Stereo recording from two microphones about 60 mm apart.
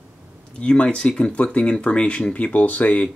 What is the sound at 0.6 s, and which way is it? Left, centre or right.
Speech, centre.